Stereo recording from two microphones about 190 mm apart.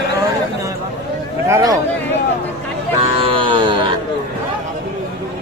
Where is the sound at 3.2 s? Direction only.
25° right (ahead or behind).